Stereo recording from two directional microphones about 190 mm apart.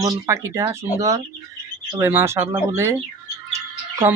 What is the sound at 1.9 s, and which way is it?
Speech, 10° right (ahead or behind).